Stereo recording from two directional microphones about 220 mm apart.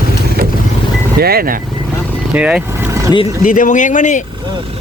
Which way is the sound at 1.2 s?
45° right (ahead or behind).